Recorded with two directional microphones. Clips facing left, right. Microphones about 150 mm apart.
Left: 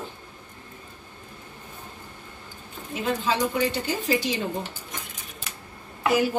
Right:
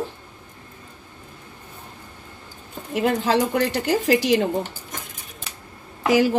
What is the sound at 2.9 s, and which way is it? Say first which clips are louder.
Speech: right 6 dB; 70° right (ahead or behind).